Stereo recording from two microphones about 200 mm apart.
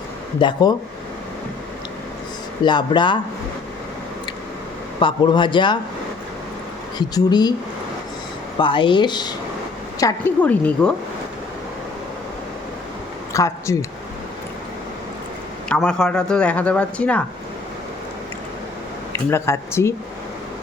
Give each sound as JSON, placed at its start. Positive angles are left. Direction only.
{"t": 0.3, "sound": "speech", "side_deg": 25}
{"t": 2.6, "sound": "speech", "side_deg": 20}
{"t": 4.9, "sound": "speech", "side_deg": 25}
{"t": 7.1, "sound": "speech", "side_deg": 20}
{"t": 8.5, "sound": "a woman's voice", "side_deg": 25}
{"t": 13.3, "sound": "speech", "side_deg": 15}
{"t": 15.7, "sound": "speech", "side_deg": 5}
{"t": 19.1, "sound": "speech", "side_deg": 15}